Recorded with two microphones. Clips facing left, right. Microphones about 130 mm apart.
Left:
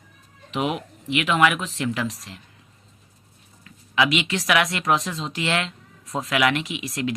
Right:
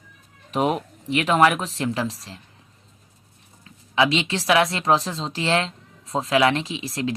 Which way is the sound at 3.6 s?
30° right (ahead or behind).